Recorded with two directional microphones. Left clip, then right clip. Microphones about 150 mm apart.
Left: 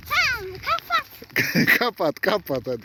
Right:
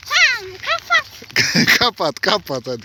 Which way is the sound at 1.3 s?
5° left (ahead or behind).